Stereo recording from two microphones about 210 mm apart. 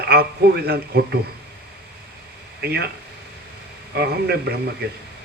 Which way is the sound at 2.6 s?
50° right (ahead or behind).